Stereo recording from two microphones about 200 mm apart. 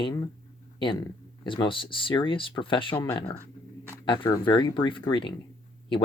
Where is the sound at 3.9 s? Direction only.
25° left (ahead or behind).